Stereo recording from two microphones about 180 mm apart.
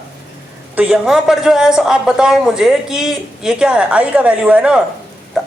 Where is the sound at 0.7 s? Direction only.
10° right (ahead or behind).